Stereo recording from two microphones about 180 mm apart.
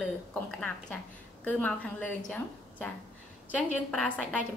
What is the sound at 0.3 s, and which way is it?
A woman's voice, 5° left (ahead or behind).